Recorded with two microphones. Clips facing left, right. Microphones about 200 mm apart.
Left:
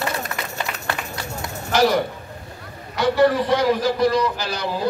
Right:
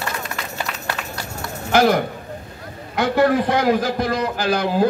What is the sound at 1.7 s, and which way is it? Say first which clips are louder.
A man's voice: right 2 dB; 55° right (ahead or behind).